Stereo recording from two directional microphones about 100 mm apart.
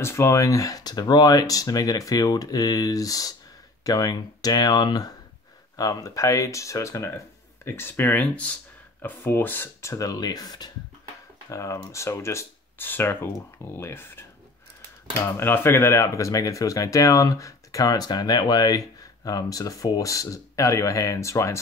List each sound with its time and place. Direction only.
0.0 s speech: 25° left (ahead or behind)